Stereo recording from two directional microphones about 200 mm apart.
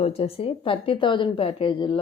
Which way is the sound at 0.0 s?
30° left (ahead or behind).